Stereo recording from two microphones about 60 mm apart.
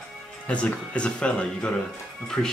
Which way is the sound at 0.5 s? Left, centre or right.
Centre.